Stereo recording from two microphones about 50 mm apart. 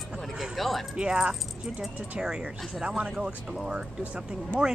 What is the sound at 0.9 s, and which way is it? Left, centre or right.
Speech, centre.